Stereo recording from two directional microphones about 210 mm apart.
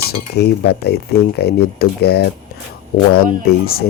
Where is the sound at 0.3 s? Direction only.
50° left (ahead or behind).